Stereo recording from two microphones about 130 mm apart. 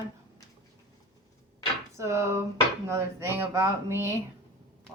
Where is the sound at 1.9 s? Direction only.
25° right (ahead or behind).